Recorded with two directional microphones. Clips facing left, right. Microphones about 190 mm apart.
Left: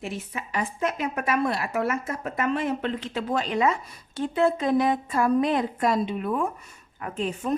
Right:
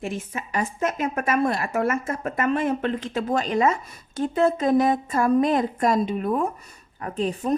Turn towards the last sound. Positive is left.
turn(degrees=-35)  # may be behind; listen again after turning